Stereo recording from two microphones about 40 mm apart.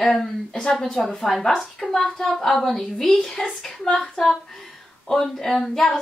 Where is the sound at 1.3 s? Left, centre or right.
Centre.